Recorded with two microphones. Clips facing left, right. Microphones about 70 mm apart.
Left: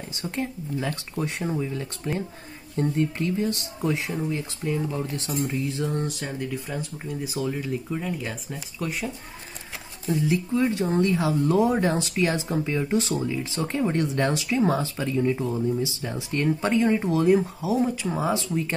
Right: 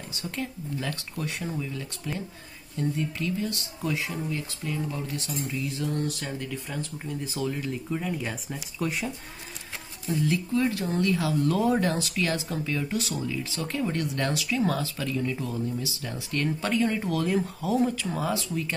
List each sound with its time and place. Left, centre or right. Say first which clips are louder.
0.2 s speech: left 4 dB; left
5.2 s speech: left 5 dB; left
6.4 s speech: left 3 dB; centre
10.2 s speech: left 2 dB; centre